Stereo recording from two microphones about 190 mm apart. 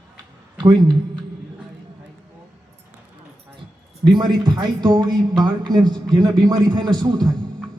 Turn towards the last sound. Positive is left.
turn(degrees=-20)  # may be behind; listen again after turning